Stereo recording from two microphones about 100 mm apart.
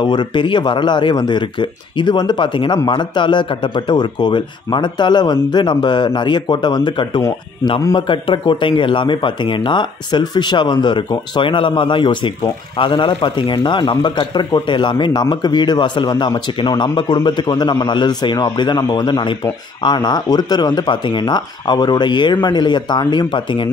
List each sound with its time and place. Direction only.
0.0 s a man's voice: 50° left (ahead or behind)